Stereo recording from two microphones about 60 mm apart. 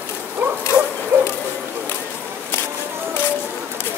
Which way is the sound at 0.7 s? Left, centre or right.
Right.